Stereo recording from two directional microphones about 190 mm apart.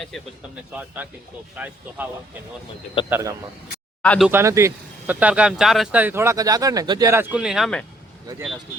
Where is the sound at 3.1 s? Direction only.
15° right (ahead or behind).